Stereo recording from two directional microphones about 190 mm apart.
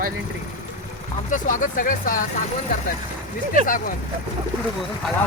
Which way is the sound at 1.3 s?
45° left (ahead or behind).